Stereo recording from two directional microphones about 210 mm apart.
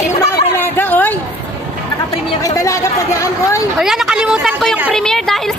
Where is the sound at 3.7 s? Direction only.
Centre (ahead or behind).